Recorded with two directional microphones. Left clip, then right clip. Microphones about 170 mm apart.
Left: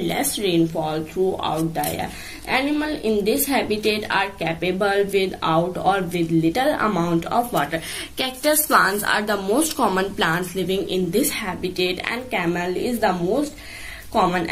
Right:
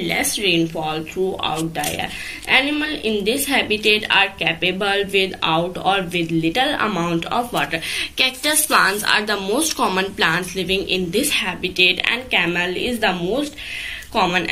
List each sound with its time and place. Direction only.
0.0 s a woman's voice: 30° left (ahead or behind)
7.5 s a woman's voice: 30° left (ahead or behind)
14.1 s a woman's voice: 30° left (ahead or behind)